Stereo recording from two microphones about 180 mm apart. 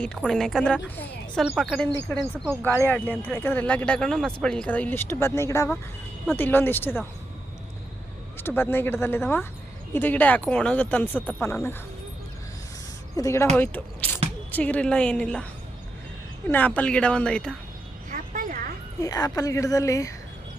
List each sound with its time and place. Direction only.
0.0 s a woman's voice: 5° left (ahead or behind)
8.4 s speech: 10° left (ahead or behind)
13.1 s a woman's voice: 15° left (ahead or behind)
16.5 s a woman's voice: 10° left (ahead or behind)
18.1 s a sound: 50° right (ahead or behind)
18.9 s speech: 20° left (ahead or behind)